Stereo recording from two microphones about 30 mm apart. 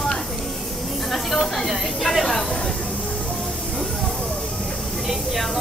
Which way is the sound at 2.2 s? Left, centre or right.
Centre.